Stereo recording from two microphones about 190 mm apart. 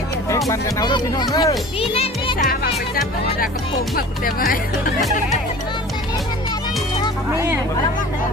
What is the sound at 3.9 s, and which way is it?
Speech, 50° left (ahead or behind).